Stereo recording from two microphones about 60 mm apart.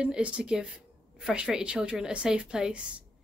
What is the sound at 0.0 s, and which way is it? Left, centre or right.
Speech, centre.